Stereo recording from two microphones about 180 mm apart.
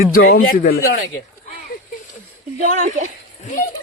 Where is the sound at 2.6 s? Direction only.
45° right (ahead or behind).